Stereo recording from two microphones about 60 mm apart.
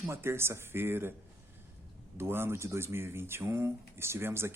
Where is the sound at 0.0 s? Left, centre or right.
Right.